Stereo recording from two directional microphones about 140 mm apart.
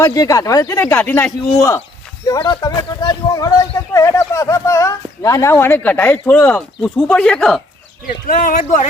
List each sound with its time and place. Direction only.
0.0 s speech: 25° left (ahead or behind); by 7.6 s 5° left (ahead or behind)
8.0 s speech: 85° left